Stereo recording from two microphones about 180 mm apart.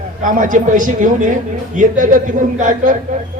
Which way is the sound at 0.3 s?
45° right (ahead or behind).